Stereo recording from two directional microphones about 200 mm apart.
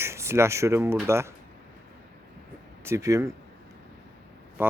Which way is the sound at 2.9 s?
15° right (ahead or behind).